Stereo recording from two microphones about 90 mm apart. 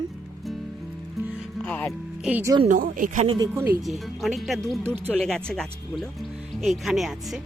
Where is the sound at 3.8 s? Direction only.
Centre (ahead or behind).